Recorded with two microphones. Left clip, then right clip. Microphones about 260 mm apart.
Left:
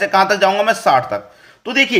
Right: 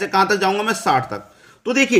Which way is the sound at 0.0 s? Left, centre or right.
Centre.